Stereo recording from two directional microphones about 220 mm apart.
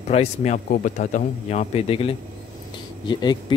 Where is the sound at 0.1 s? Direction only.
30° left (ahead or behind).